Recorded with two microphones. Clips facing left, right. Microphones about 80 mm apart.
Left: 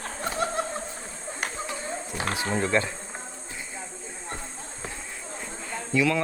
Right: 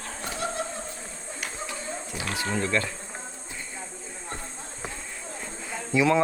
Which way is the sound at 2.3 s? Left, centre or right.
Left.